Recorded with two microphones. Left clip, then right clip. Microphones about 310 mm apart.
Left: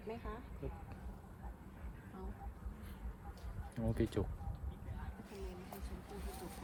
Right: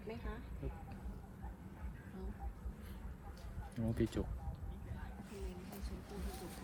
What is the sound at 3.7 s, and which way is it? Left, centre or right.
Speech, left.